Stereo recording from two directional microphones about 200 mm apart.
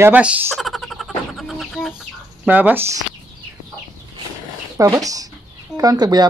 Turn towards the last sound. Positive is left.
turn(degrees=-20)  # may be behind; listen again after turning